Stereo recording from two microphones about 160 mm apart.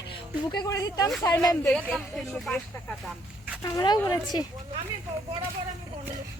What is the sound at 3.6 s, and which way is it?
Speech, 25° left (ahead or behind).